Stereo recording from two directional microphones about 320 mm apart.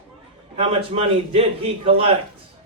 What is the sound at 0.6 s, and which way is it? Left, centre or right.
A man's voice, centre.